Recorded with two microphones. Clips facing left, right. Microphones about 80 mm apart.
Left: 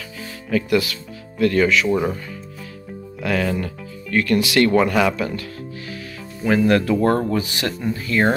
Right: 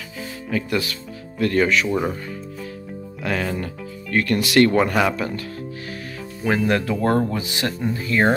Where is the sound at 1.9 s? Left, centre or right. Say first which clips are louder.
Left 3 dB; centre.